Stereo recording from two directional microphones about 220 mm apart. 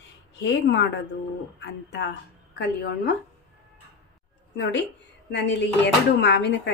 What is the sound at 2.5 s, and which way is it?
Speech, 50° left (ahead or behind).